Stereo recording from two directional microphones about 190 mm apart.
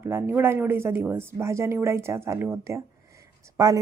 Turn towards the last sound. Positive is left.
turn(degrees=-15)  # may be behind; listen again after turning